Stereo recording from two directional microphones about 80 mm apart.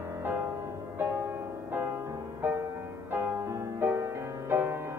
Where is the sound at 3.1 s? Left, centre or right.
Right.